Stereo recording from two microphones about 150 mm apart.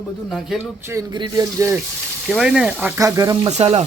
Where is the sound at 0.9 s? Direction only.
20° right (ahead or behind).